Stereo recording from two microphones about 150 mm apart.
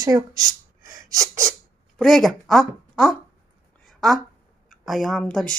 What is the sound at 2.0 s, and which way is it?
Speech, centre (ahead or behind).